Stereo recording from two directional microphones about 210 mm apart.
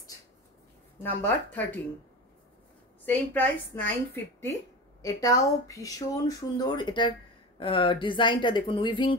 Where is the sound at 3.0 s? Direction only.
10° left (ahead or behind).